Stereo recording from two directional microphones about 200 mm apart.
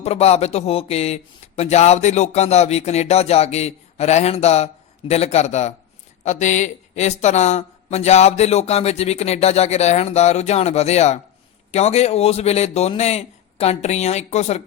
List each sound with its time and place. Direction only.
0.0 s speech: 30° left (ahead or behind)